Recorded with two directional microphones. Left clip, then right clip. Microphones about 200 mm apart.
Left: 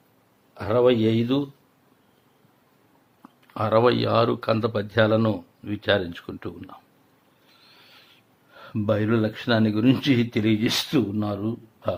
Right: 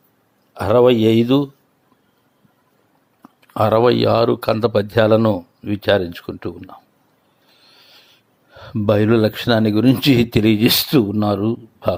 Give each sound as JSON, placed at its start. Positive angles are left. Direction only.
{"t": 0.5, "sound": "speech", "side_deg": -40}
{"t": 3.2, "sound": "speech", "side_deg": -35}
{"t": 8.5, "sound": "speech", "side_deg": -30}